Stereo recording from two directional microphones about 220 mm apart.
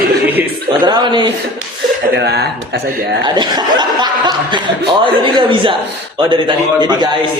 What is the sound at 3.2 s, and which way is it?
Speech, 20° right (ahead or behind).